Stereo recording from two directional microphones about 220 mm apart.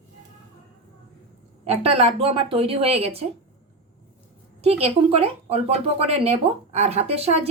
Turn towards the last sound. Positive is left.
turn(degrees=-30)  # may be behind; listen again after turning